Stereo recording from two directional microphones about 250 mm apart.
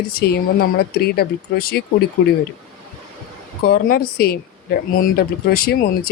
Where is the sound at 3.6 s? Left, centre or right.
Left.